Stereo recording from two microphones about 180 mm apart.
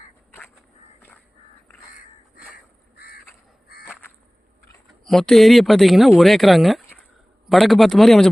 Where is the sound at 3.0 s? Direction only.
55° left (ahead or behind).